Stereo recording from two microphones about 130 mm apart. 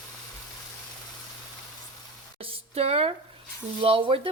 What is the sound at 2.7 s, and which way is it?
Speech, 50° right (ahead or behind).